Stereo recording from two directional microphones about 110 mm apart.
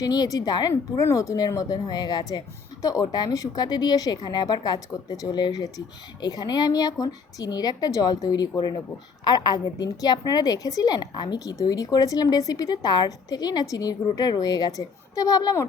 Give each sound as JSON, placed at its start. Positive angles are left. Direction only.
{"t": 0.0, "sound": "a woman's voice", "side_deg": 35}
{"t": 0.7, "sound": "a woman's voice", "side_deg": 25}